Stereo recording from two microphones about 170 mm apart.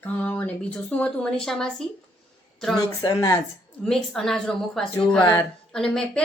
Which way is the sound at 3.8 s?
5° left (ahead or behind).